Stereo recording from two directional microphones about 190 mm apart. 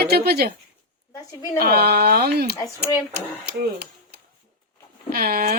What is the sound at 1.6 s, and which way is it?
Speech, 55° right (ahead or behind).